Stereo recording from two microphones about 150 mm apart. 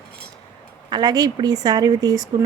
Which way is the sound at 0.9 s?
25° right (ahead or behind).